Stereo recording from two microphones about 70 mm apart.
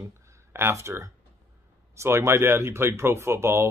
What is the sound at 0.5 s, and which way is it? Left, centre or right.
Speech, right.